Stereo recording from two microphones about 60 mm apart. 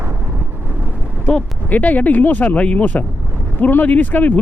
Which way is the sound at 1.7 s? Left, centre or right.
Left.